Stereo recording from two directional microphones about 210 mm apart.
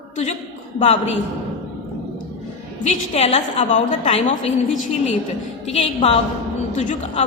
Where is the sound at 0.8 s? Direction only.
30° left (ahead or behind).